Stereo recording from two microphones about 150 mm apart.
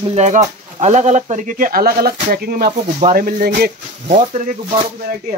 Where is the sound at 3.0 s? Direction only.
70° right (ahead or behind).